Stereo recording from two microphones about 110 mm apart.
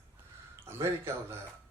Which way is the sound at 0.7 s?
20° right (ahead or behind).